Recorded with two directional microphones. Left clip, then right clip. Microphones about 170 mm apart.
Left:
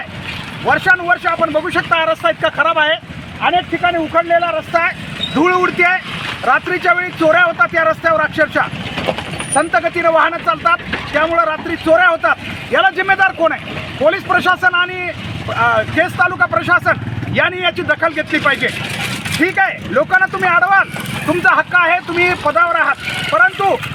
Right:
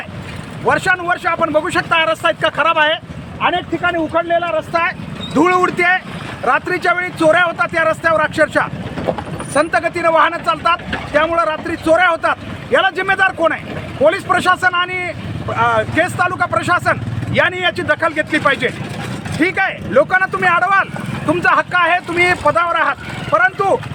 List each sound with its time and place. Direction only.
0.7 s speech: 30° right (ahead or behind)